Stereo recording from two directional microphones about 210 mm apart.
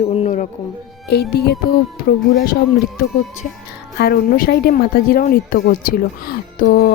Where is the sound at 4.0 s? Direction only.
45° left (ahead or behind).